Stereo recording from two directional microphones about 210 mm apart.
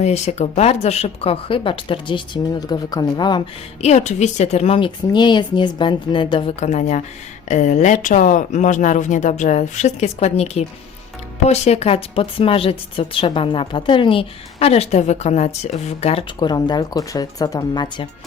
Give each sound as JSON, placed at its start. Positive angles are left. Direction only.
{"t": 0.0, "sound": "speech", "side_deg": 30}
{"t": 3.8, "sound": "speech", "side_deg": 30}
{"t": 6.7, "sound": "speech", "side_deg": 35}